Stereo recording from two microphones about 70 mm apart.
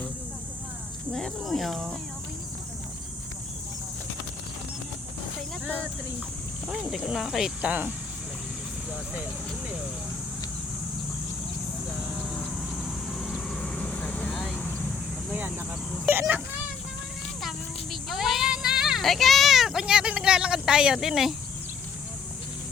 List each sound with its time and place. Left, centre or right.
1.1 s speech: centre
6.7 s speech: centre
7.6 s speech: right
12.7 s vehicle: centre
14.5 s vehicle: left
15.3 s speech: right
18.1 s speech: centre